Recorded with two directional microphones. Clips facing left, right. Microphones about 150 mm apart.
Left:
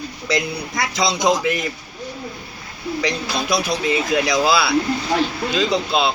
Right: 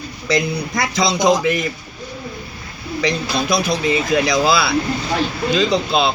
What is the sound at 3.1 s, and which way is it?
Speech, 10° left (ahead or behind).